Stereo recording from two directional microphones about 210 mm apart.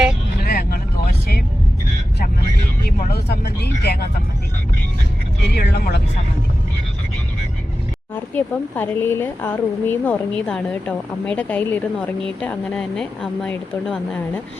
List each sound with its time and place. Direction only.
0.4 s vehicle: 45° left (ahead or behind)
3.1 s speech: 50° left (ahead or behind)
5.5 s speech: 50° left (ahead or behind)
8.1 s speech: 10° left (ahead or behind)